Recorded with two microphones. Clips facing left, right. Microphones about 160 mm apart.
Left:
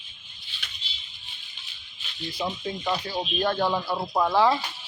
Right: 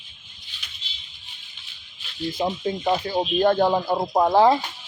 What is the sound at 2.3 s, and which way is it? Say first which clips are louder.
Speech: right 5 dB; 45° right (ahead or behind).